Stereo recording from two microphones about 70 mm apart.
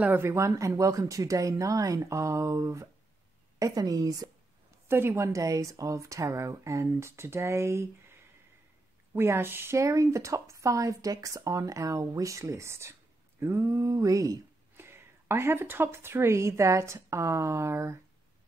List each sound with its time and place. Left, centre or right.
0.2 s speech: right
3.5 s a sound: right
4.8 s speech: right
9.1 s a woman's voice: right
9.8 s speech: right
13.4 s a sound: right
14.8 s a woman's voice: right